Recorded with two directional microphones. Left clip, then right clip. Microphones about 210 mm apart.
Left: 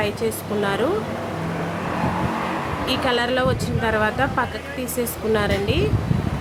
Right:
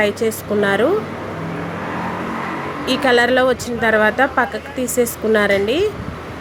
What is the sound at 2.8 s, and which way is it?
A woman's voice, 20° right (ahead or behind).